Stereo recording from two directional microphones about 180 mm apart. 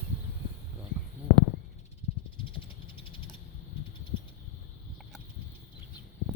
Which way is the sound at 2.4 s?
30° left (ahead or behind).